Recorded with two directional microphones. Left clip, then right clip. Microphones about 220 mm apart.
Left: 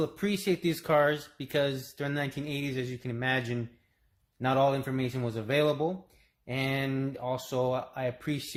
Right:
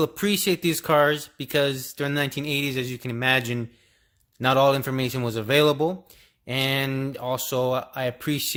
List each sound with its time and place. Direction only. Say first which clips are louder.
0.0 s speech: right 7 dB; 40° right (ahead or behind)